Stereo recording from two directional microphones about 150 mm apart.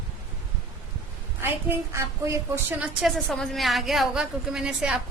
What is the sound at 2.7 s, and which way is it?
A woman's voice, 5° right (ahead or behind).